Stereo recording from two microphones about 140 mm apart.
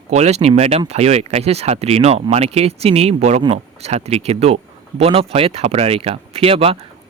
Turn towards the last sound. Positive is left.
turn(degrees=-45)  # may be behind; listen again after turning